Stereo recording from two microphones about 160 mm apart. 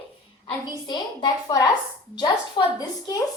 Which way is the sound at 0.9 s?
30° left (ahead or behind).